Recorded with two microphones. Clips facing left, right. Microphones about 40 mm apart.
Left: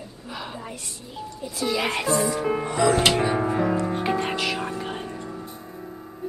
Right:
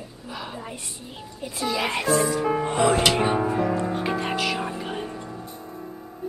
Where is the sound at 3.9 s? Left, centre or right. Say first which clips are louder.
Left 1 dB; centre.